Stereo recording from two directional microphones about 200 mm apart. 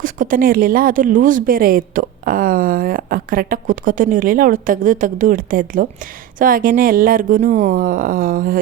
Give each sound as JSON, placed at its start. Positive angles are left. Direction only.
{"t": 0.0, "sound": "speech", "side_deg": -40}